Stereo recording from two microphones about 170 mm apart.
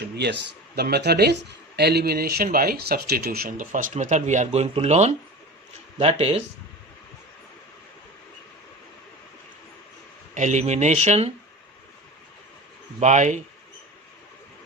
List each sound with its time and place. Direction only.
0.8 s speech: 70° right (ahead or behind); by 6.3 s 35° right (ahead or behind)
10.3 s speech: 45° right (ahead or behind)
13.0 s speech: 45° right (ahead or behind)